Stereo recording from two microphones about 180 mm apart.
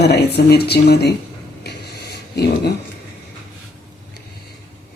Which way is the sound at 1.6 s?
65° left (ahead or behind).